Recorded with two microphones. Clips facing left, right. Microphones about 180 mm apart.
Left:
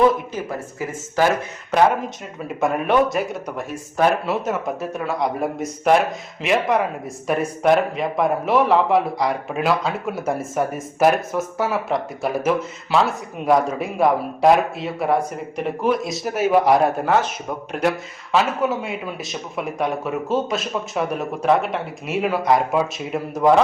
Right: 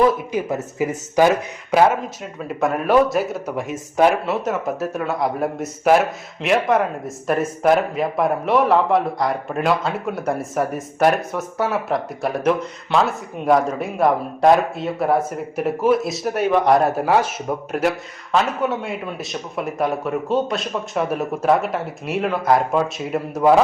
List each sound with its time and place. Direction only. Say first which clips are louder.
0.3 s speech: right 5 dB; 20° right (ahead or behind)
2.5 s speech: right 2 dB; centre (ahead or behind)